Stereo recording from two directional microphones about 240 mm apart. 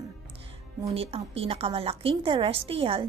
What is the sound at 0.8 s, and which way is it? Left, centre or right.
A woman's voice, right.